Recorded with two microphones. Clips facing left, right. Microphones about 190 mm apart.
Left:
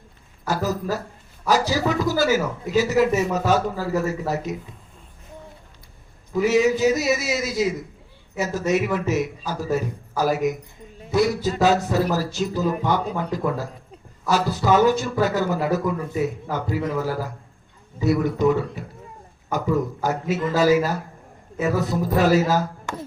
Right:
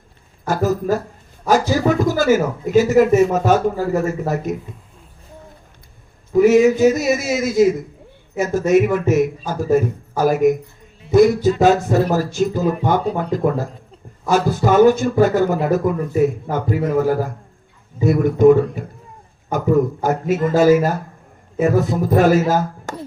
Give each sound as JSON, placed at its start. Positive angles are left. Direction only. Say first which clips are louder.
{"t": 0.4, "sound": "a sound", "louder": "right 6 dB", "side_deg": -50}
{"t": 1.5, "sound": "a man's voice", "louder": "right 5 dB", "side_deg": -50}
{"t": 6.3, "sound": "a man's voice", "louder": "right 7 dB", "side_deg": -50}